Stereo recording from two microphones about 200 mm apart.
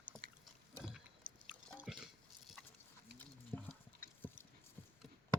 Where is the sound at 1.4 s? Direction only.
5° right (ahead or behind).